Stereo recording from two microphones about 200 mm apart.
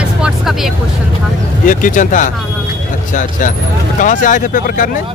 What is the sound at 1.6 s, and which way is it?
Speech, 40° left (ahead or behind).